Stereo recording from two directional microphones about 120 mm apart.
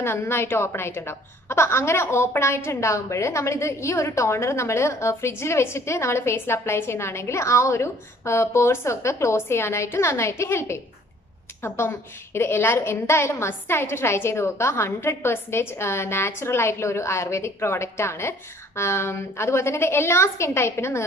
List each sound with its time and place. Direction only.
0.0 s a woman's voice: 20° left (ahead or behind)